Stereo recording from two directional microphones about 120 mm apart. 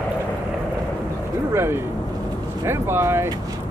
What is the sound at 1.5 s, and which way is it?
Speech, 20° right (ahead or behind).